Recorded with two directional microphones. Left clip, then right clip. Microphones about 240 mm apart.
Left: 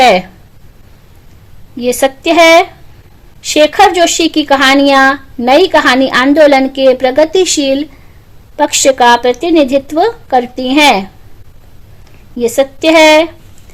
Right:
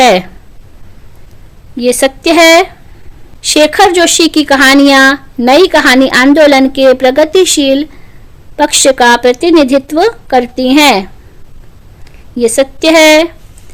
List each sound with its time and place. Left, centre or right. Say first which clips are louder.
0.0 s speech: right 1 dB; centre
1.7 s speech: right 2 dB; right
12.4 s speech: right 2 dB; right